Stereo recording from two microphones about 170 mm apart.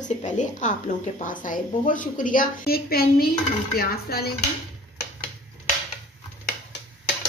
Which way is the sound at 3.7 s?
65° left (ahead or behind).